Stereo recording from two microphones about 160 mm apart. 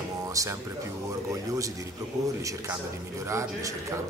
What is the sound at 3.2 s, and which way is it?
Speech, 20° right (ahead or behind).